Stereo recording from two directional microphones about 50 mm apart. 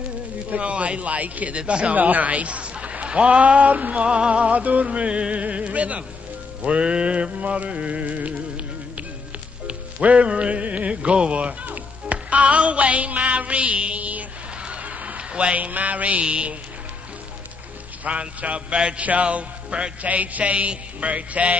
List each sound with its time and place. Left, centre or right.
0.5 s a man's voice: right
2.0 s a man's voice: right
6.6 s music: right
18.0 s a man's voice: right